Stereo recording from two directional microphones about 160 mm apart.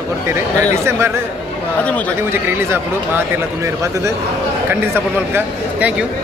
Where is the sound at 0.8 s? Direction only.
15° right (ahead or behind).